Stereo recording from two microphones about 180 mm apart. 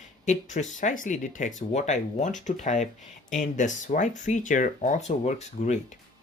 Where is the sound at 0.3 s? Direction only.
40° left (ahead or behind).